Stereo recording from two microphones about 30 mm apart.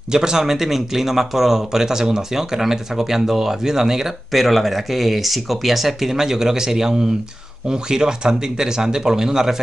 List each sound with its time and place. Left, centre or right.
0.1 s speech: right
4.3 s speech: centre